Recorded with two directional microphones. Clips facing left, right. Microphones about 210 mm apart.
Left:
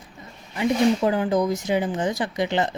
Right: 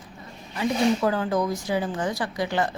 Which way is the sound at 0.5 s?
20° left (ahead or behind).